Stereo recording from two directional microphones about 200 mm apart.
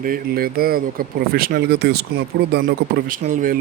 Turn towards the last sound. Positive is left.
turn(degrees=-40)  # may be behind; listen again after turning